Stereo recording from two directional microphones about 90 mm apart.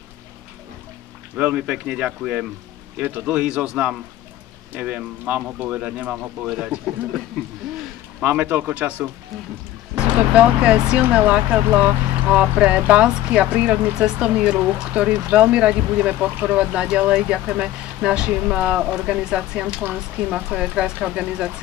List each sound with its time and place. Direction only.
1.3 s speech: 10° right (ahead or behind)
7.4 s speech: 10° left (ahead or behind)
8.2 s speech: 15° right (ahead or behind)